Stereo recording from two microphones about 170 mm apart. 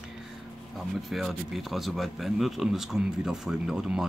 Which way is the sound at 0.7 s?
Centre (ahead or behind).